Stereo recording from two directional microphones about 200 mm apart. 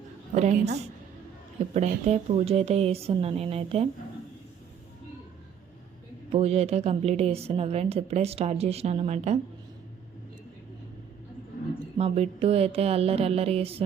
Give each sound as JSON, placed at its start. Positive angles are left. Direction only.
{"t": 0.3, "sound": "a woman's voice", "side_deg": -35}
{"t": 6.3, "sound": "a woman's voice", "side_deg": -30}
{"t": 11.9, "sound": "a sound", "side_deg": -30}